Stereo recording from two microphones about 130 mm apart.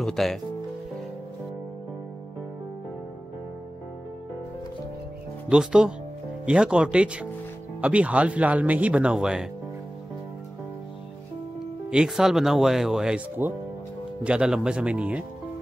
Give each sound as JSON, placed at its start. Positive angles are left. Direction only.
{"t": 0.0, "sound": "speech", "side_deg": 0}
{"t": 5.5, "sound": "speech", "side_deg": -5}
{"t": 11.9, "sound": "speech", "side_deg": -5}
{"t": 13.4, "sound": "speech", "side_deg": -15}